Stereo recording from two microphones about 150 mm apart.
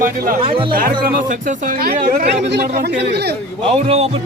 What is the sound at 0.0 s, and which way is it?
Speech, 70° right (ahead or behind).